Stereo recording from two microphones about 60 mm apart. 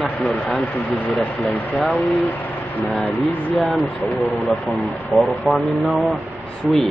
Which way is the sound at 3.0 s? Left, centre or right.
Left.